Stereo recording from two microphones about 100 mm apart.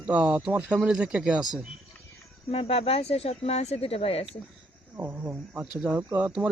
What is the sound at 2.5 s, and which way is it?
Speech, 70° left (ahead or behind).